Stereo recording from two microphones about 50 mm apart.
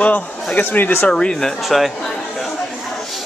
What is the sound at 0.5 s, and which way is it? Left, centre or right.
Speech, left.